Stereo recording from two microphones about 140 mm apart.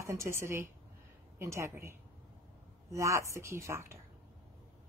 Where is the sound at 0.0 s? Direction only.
20° right (ahead or behind).